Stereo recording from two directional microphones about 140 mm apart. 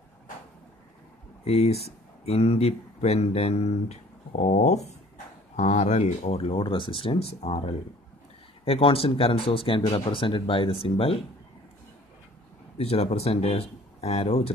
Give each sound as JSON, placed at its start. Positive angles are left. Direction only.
{"t": 1.4, "sound": "speech", "side_deg": 45}
{"t": 12.7, "sound": "speech", "side_deg": 45}